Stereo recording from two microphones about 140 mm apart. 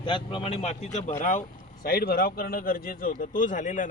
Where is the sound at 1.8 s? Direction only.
90° left.